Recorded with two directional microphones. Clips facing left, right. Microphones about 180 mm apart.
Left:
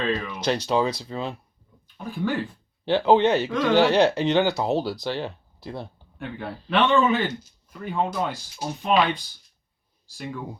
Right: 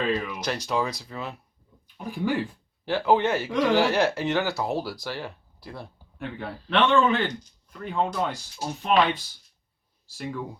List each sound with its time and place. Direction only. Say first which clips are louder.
0.0 s speech: even; 5° right (ahead or behind)
0.3 s speech: left 4 dB; 25° left (ahead or behind)
2.0 s speech: even; 15° right (ahead or behind)
2.8 s speech: left 4 dB; 25° left (ahead or behind)
6.1 s speech: left 1 dB; centre (ahead or behind)